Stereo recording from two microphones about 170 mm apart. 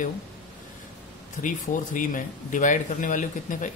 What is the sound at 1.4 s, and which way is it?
Speech, 50° left (ahead or behind).